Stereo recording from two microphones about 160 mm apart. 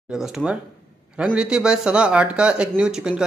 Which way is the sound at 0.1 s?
5° right (ahead or behind).